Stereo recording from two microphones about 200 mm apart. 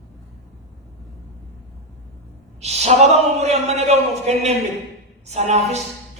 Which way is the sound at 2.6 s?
35° right (ahead or behind).